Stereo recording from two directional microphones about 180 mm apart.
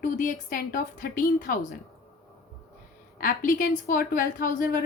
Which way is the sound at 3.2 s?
45° left (ahead or behind).